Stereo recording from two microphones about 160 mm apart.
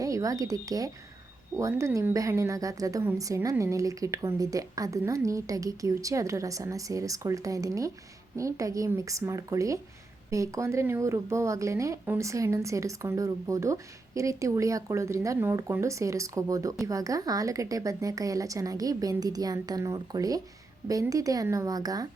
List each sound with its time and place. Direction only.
0.0 s speech: 20° right (ahead or behind)